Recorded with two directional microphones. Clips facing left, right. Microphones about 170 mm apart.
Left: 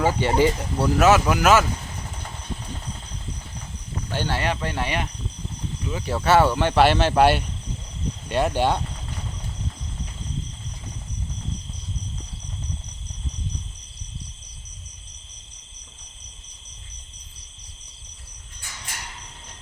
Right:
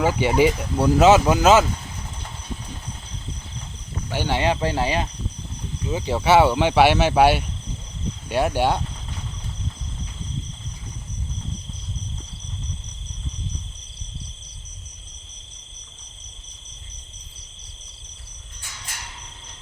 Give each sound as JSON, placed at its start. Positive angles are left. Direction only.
{"t": 0.0, "sound": "speech", "side_deg": -10}
{"t": 4.1, "sound": "speech", "side_deg": -15}
{"t": 5.9, "sound": "speech", "side_deg": -20}